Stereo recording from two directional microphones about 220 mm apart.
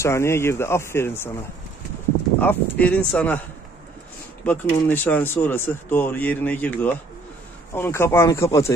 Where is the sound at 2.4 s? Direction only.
5° left (ahead or behind).